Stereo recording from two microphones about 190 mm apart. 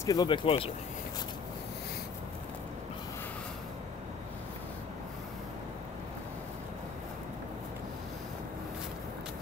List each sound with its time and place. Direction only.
0.0 s speech: 20° left (ahead or behind)